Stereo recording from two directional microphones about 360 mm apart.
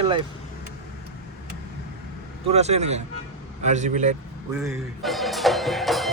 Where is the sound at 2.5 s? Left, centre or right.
Centre.